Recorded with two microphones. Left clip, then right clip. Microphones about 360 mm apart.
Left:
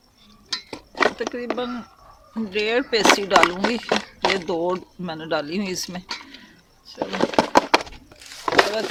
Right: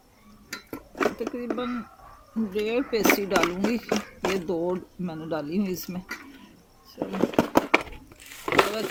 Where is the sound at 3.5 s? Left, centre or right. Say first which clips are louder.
Left 5 dB; left.